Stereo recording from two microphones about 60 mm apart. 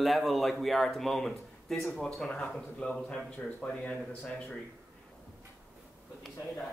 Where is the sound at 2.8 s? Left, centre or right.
Left.